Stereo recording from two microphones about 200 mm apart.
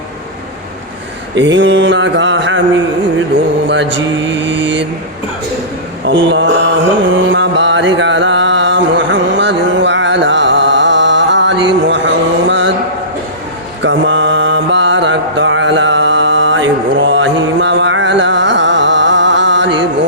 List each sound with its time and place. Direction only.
1.4 s a man's voice: 65° right (ahead or behind)
3.7 s mantra: 65° right (ahead or behind)
6.1 s mantra: 65° right (ahead or behind)
7.1 s music: 70° right (ahead or behind)
13.8 s mantra: 70° right (ahead or behind)